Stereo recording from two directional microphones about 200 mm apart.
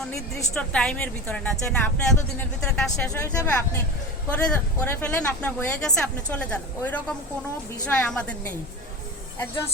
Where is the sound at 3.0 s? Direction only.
15° left (ahead or behind).